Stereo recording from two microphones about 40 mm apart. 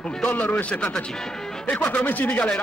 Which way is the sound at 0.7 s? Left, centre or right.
Left.